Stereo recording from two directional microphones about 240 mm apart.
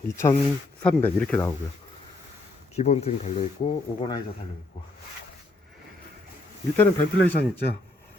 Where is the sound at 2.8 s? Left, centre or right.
Left.